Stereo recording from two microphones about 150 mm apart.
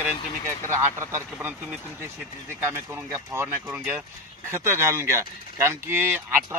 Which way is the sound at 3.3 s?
10° right (ahead or behind).